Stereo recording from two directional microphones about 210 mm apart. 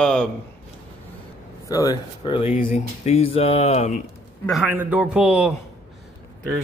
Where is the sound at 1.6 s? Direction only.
15° left (ahead or behind).